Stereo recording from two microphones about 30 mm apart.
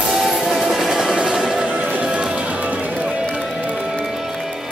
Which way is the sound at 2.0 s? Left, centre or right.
Right.